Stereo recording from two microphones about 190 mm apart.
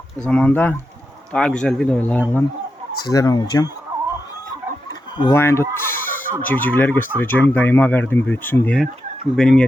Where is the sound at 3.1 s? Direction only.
20° left (ahead or behind).